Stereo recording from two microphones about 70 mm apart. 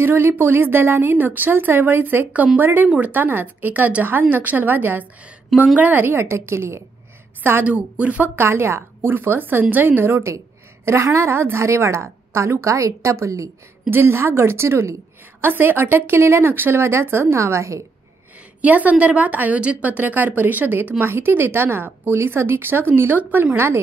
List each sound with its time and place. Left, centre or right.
0.0 s a woman's voice: right
7.6 s a woman's voice: centre
8.4 s a woman's voice: right
13.8 s a woman's voice: right
18.6 s a woman's voice: right